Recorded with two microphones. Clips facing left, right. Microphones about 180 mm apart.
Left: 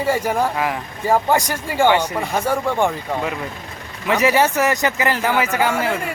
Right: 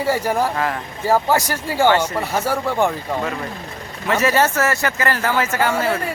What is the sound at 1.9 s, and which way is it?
Speech, 15° left (ahead or behind).